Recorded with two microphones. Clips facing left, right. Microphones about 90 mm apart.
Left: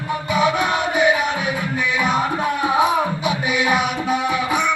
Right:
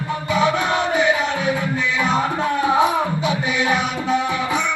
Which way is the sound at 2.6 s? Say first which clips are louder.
Even; 15° left (ahead or behind).